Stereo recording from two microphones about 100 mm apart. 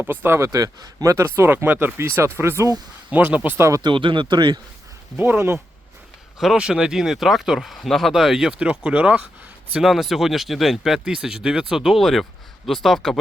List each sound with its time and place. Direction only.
0.0 s speech: 20° right (ahead or behind)
3.1 s speech: 15° right (ahead or behind)
3.7 s speech: 40° right (ahead or behind)
3.9 s speech: 55° right (ahead or behind)
5.1 s speech: 20° right (ahead or behind)
6.4 s speech: 5° right (ahead or behind)
9.7 s speech: centre (ahead or behind)